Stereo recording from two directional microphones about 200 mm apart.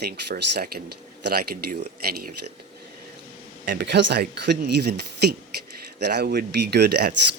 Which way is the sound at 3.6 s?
55° right (ahead or behind).